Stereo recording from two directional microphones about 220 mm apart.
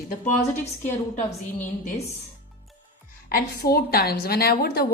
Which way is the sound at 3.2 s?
45° left (ahead or behind).